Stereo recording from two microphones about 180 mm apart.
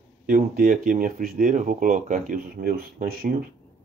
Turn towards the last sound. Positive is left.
turn(degrees=-55)  # may be behind; listen again after turning